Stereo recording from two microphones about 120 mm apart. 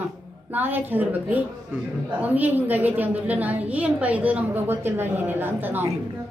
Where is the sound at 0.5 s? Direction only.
15° right (ahead or behind).